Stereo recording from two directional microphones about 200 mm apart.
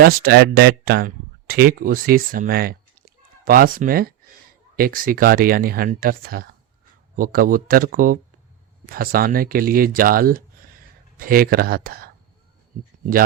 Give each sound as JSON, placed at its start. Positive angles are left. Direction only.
{"t": 0.0, "sound": "speech", "side_deg": -50}